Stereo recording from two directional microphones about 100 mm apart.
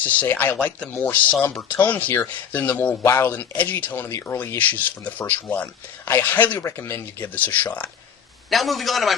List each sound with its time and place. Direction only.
0.0 s speech: 15° left (ahead or behind)
8.4 s a man's voice: centre (ahead or behind)